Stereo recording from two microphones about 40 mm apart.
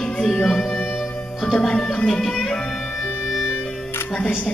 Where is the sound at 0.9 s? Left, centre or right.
Centre.